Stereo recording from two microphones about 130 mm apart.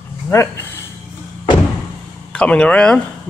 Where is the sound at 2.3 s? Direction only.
10° left (ahead or behind).